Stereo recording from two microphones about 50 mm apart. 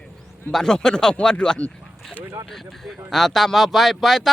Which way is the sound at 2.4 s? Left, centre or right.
Centre.